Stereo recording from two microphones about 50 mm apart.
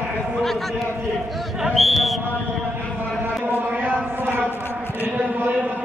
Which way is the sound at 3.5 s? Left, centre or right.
Right.